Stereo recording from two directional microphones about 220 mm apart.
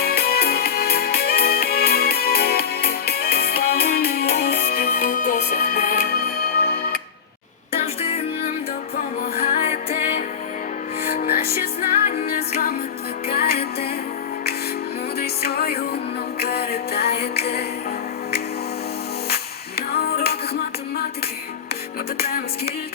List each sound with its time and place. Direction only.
0.0 s music: 45° left (ahead or behind)
9.0 s music: 40° left (ahead or behind)
11.1 s music: 40° left (ahead or behind)
15.2 s music: 45° left (ahead or behind)
19.9 s music: 45° left (ahead or behind)
22.2 s music: 45° left (ahead or behind)